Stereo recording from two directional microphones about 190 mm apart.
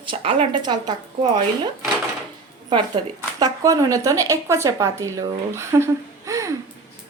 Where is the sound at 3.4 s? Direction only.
15° right (ahead or behind).